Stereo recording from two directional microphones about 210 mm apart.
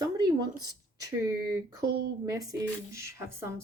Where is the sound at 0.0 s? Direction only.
20° right (ahead or behind).